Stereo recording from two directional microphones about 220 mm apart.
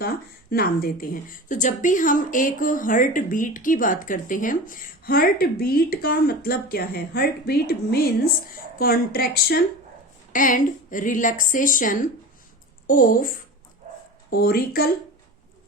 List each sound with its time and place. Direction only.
0.5 s a woman's voice: 40° left (ahead or behind)